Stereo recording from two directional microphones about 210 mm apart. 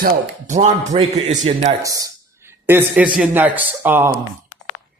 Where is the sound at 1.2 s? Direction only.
35° right (ahead or behind).